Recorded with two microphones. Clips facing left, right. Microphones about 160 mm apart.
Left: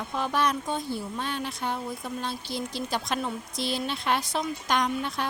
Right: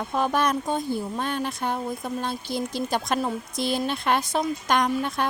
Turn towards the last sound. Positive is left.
turn(degrees=-50)  # may be behind; listen again after turning